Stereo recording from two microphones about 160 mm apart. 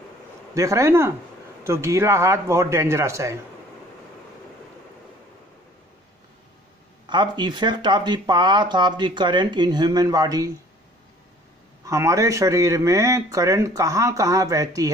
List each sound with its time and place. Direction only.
0.6 s speech: 20° right (ahead or behind)
7.1 s speech: 30° right (ahead or behind)
11.8 s speech: 20° right (ahead or behind)